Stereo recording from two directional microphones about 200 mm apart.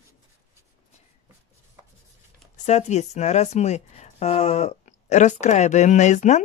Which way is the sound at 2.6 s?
35° left (ahead or behind).